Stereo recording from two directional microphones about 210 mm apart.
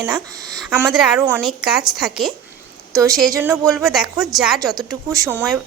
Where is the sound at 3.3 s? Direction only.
15° right (ahead or behind).